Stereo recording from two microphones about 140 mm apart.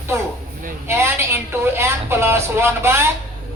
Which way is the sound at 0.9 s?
15° right (ahead or behind).